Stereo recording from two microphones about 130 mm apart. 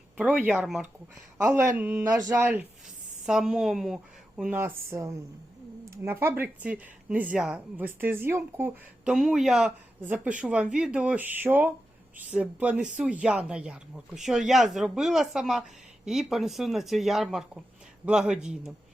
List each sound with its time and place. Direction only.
0.2 s speech: 10° right (ahead or behind)
1.4 s a woman's voice: 20° right (ahead or behind)
4.6 s speech: 25° right (ahead or behind)
9.1 s speech: centre (ahead or behind)